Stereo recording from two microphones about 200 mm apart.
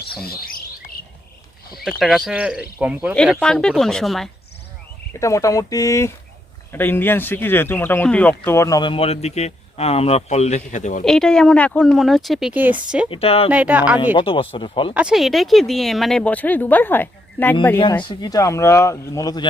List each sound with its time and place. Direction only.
1.8 s speech: centre (ahead or behind)
3.2 s speech: 5° left (ahead or behind)
5.2 s a man's voice: 15° left (ahead or behind); by 11.0 s 40° left (ahead or behind)
11.0 s speech: 5° left (ahead or behind)
13.1 s speech: 30° left (ahead or behind)
13.5 s speech: 5° right (ahead or behind)
14.2 s speech: 25° left (ahead or behind)
14.9 s speech: 5° right (ahead or behind)
18.0 s speech: 20° left (ahead or behind)